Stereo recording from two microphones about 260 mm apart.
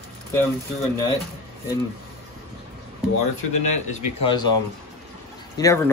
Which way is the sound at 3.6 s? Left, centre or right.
Left.